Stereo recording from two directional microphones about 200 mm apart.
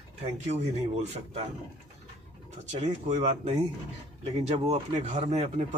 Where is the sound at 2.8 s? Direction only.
35° right (ahead or behind).